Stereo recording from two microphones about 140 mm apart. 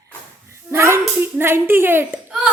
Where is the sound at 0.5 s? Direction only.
20° right (ahead or behind).